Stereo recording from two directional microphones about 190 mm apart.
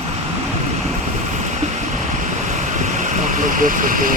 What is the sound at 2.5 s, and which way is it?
Vehicle, 40° right (ahead or behind).